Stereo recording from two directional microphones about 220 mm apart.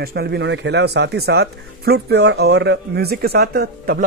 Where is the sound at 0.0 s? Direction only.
45° right (ahead or behind).